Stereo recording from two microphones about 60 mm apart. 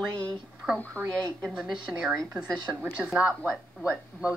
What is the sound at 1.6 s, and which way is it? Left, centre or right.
Speech, centre.